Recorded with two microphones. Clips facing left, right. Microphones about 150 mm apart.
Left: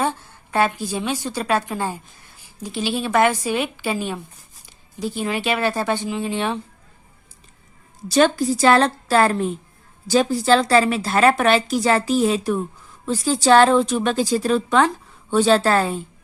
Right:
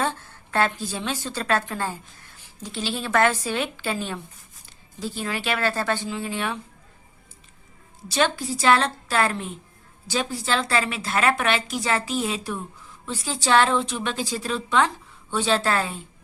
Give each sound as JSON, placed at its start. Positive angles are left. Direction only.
{"t": 0.0, "sound": "a woman's voice", "side_deg": 15}
{"t": 8.0, "sound": "a woman's voice", "side_deg": 45}